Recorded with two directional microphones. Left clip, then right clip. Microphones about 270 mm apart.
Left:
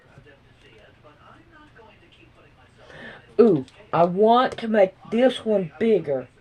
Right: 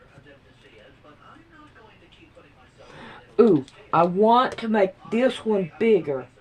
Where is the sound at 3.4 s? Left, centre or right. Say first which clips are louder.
Even; centre.